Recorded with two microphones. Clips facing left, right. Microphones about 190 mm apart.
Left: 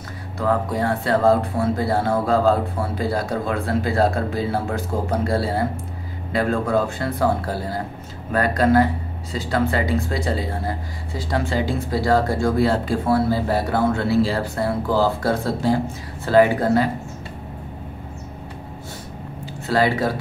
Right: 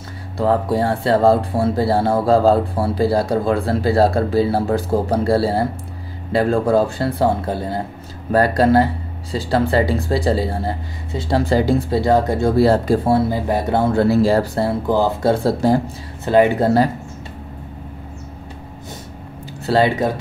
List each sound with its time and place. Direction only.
0.4 s speech: 30° right (ahead or behind)
7.4 s speech: 20° right (ahead or behind)
8.3 s speech: 35° right (ahead or behind)
11.9 s speech: 20° right (ahead or behind)
12.5 s speech: 40° right (ahead or behind)
13.1 s speech: 20° right (ahead or behind); by 14.7 s 35° right (ahead or behind)
14.9 s speech: 20° right (ahead or behind)
15.4 s speech: 40° right (ahead or behind)
16.3 s speech: 20° right (ahead or behind)
19.6 s speech: 25° right (ahead or behind)